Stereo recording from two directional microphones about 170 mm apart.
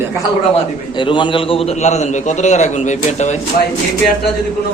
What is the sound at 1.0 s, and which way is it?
A man's voice, 30° left (ahead or behind).